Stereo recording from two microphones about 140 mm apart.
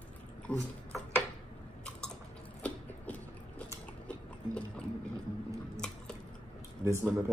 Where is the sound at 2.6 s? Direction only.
10° left (ahead or behind).